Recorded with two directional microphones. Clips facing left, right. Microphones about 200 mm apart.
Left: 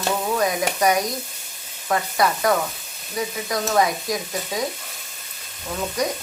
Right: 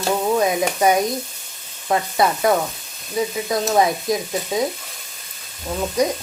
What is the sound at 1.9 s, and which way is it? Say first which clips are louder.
Speech: right 2 dB; 25° right (ahead or behind).